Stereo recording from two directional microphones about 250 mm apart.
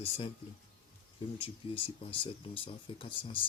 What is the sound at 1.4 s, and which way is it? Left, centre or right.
Speech, left.